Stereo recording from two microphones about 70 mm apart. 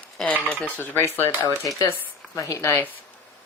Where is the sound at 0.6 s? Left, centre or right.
Left.